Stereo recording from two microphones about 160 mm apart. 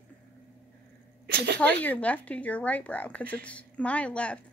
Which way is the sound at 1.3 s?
90° right.